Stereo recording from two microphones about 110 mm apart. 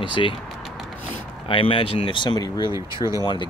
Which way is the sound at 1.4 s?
50° left (ahead or behind).